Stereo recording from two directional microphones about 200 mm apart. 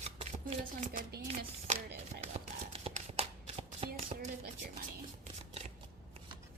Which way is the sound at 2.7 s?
30° right (ahead or behind).